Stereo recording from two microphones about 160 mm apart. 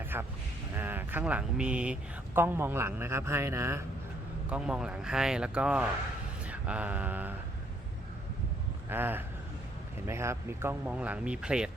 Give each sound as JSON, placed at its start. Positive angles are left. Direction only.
{"t": 0.1, "sound": "speech", "side_deg": -15}
{"t": 4.4, "sound": "speech", "side_deg": -5}
{"t": 6.5, "sound": "mantra", "side_deg": -10}
{"t": 8.9, "sound": "speech", "side_deg": -15}